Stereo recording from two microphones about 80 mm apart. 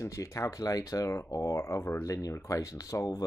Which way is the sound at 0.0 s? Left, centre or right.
Left.